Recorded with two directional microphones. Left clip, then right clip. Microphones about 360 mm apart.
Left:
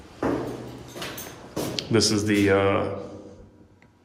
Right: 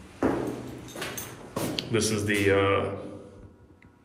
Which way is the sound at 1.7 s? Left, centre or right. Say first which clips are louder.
Left 6 dB; centre.